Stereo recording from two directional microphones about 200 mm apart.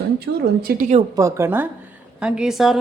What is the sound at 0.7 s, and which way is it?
Speech, 35° right (ahead or behind).